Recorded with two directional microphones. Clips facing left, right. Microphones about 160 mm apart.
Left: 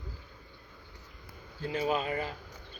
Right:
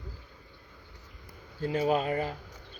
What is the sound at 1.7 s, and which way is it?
Speech, 50° right (ahead or behind).